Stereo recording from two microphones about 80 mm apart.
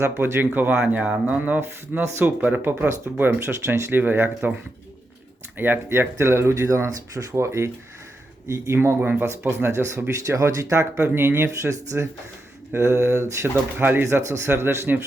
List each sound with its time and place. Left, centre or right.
0.0 s speech: right
5.5 s speech: right